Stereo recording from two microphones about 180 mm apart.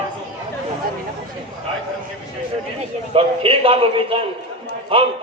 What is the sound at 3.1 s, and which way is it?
A man's voice, 30° right (ahead or behind).